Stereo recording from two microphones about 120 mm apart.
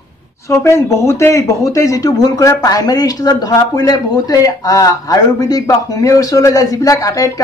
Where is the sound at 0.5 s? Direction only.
25° left (ahead or behind).